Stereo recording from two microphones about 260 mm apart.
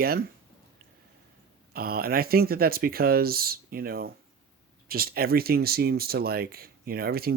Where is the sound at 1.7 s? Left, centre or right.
Right.